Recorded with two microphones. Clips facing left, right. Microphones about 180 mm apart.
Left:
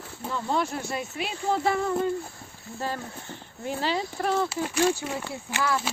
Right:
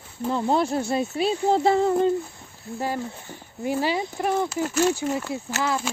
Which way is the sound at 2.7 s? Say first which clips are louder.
Right 4 dB; 15° right (ahead or behind).